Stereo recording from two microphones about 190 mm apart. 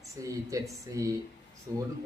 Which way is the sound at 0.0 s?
15° right (ahead or behind).